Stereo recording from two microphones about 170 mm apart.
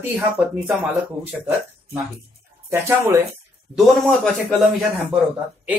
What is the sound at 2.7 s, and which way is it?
Speech, 15° right (ahead or behind).